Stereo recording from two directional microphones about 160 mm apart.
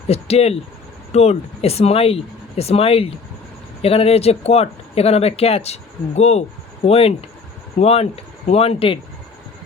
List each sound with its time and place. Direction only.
0.1 s speech: 40° left (ahead or behind)